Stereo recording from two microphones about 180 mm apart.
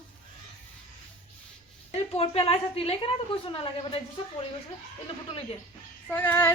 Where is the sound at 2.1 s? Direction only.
30° left (ahead or behind).